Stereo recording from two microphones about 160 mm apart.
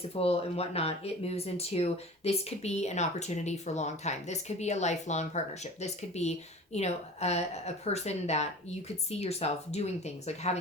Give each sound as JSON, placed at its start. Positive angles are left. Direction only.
{"t": 0.1, "sound": "speech", "side_deg": 40}